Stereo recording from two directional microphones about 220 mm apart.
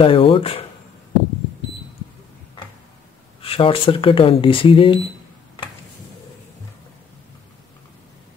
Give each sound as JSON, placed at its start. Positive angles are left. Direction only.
{"t": 0.0, "sound": "speech", "side_deg": 25}
{"t": 3.3, "sound": "speech", "side_deg": 25}